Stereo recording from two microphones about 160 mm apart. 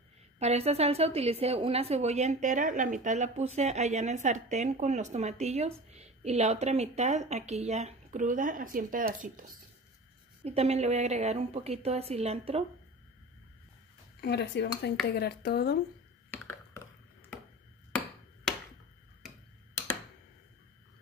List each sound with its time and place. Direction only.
0.4 s a woman's voice: 40° right (ahead or behind); by 9.6 s 60° right (ahead or behind)
10.4 s a woman's voice: 40° right (ahead or behind)
14.2 s a woman's voice: 90° left
16.3 s a sound: 15° left (ahead or behind)